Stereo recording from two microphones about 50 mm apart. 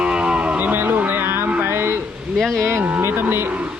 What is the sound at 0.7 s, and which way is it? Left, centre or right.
Cattle, right.